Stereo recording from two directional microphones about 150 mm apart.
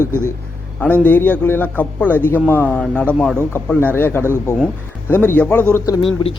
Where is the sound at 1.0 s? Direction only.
10° left (ahead or behind).